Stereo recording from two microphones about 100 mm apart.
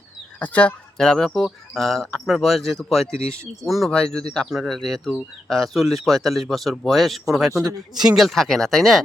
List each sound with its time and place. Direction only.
0.3 s speech: 15° left (ahead or behind)
7.5 s a man's voice: 35° right (ahead or behind)
7.9 s speech: 5° right (ahead or behind)